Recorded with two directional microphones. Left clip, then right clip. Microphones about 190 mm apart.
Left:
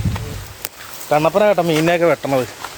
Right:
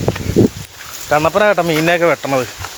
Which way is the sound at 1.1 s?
10° right (ahead or behind).